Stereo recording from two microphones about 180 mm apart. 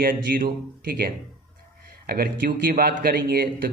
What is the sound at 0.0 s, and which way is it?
Speech, 50° right (ahead or behind).